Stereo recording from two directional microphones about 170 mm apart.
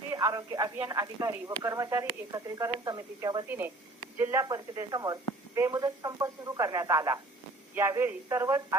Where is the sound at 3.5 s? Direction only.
10° right (ahead or behind).